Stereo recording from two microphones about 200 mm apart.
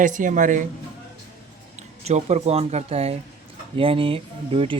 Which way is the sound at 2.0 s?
30° right (ahead or behind).